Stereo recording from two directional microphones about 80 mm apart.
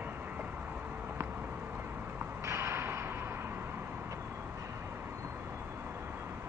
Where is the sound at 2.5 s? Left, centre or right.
Right.